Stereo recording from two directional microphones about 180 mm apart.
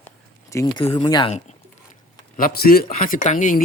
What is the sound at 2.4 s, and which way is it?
Speech, 55° left (ahead or behind).